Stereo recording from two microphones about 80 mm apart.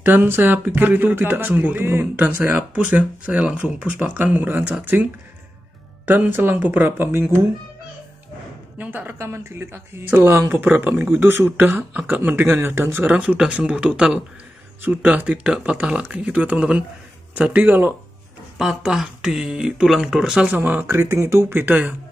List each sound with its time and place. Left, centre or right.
0.0 s speech: right
6.0 s speech: right
8.7 s speech: right
13.0 s speech: centre
18.6 s speech: centre
20.4 s speech: right